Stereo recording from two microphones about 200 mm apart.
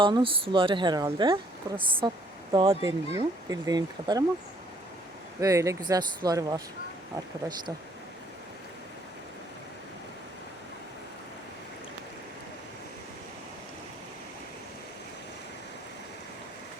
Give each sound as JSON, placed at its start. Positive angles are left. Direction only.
{"t": 0.0, "sound": "speech", "side_deg": -25}
{"t": 5.4, "sound": "speech", "side_deg": -15}